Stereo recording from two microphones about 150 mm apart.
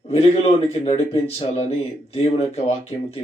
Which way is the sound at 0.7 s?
45° left (ahead or behind).